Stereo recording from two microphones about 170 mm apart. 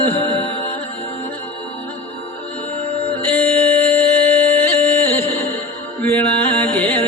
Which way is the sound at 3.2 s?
10° left (ahead or behind).